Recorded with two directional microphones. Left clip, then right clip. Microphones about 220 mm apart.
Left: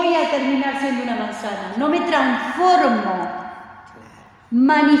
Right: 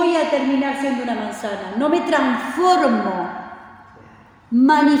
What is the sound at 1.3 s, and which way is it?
A man's voice, 40° right (ahead or behind).